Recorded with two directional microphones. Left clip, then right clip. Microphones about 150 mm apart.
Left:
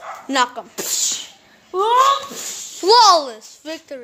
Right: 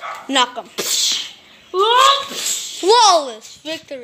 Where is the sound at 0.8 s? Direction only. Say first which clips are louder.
Right 5 dB; 55° left (ahead or behind).